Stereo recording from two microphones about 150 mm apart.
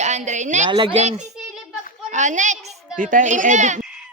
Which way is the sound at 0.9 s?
50° right (ahead or behind).